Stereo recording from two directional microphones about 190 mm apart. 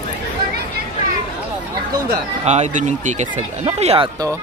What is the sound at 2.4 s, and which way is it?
Speech, 35° right (ahead or behind).